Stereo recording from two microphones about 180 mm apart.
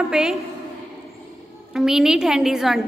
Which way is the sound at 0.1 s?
5° right (ahead or behind).